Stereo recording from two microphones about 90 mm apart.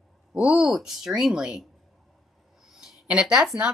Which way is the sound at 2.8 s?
10° right (ahead or behind).